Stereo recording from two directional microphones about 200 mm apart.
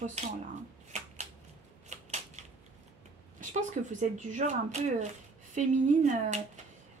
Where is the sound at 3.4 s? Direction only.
40° right (ahead or behind).